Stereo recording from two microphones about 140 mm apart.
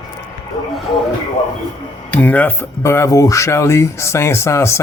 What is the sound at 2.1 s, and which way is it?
Speech, 10° left (ahead or behind).